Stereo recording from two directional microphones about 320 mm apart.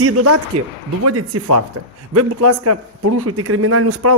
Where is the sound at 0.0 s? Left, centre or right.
Right.